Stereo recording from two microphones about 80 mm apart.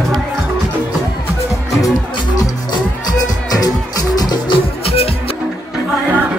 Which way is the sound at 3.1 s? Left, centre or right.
Left.